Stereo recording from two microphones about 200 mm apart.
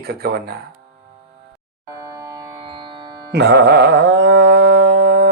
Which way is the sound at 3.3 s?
60° right (ahead or behind).